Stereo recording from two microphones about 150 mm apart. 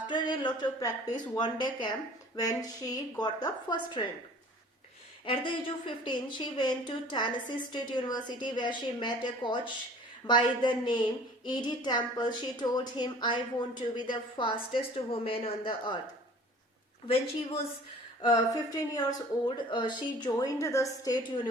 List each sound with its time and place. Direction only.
0.1 s a woman's voice: 30° left (ahead or behind)
5.2 s a woman's voice: 35° left (ahead or behind)
17.1 s a woman's voice: 40° left (ahead or behind)
18.2 s a woman's voice: 25° left (ahead or behind)